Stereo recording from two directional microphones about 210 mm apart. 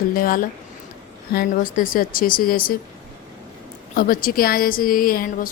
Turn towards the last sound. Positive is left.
turn(degrees=40)  # may be behind; listen again after turning